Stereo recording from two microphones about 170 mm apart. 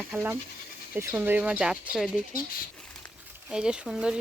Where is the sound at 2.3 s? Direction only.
60° left (ahead or behind).